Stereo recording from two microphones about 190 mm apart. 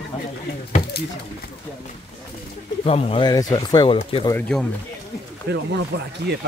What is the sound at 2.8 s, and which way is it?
Speech, 30° left (ahead or behind).